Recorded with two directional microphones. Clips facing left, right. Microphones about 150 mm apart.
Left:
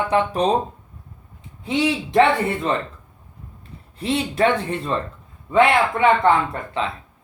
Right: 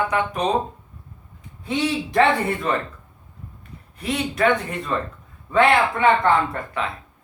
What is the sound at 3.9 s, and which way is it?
Speech, 30° left (ahead or behind).